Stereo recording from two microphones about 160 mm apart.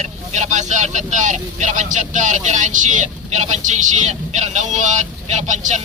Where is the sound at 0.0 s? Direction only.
50° right (ahead or behind).